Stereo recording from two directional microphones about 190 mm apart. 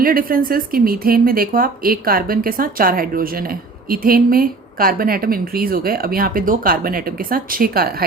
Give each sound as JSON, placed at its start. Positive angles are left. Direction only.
{"t": 0.0, "sound": "a woman's voice", "side_deg": -50}